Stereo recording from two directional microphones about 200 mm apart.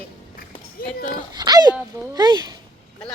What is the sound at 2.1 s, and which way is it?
Speech, 20° right (ahead or behind).